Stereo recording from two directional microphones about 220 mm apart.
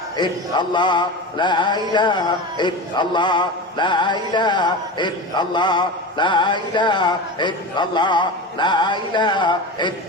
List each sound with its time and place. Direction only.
0.2 s mantra: 20° left (ahead or behind)